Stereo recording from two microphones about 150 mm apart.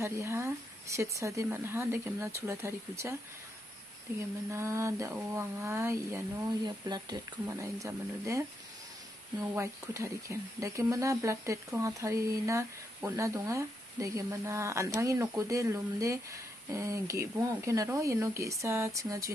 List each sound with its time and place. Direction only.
0.0 s speech: 20° right (ahead or behind)
4.5 s speech: 20° right (ahead or behind)
6.6 s speech: 30° right (ahead or behind)